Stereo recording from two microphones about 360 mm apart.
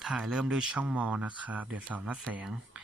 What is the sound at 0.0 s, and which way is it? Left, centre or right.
Speech, centre.